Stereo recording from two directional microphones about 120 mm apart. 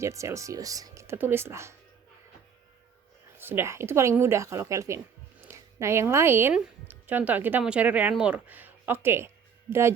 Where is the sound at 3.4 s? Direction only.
20° right (ahead or behind).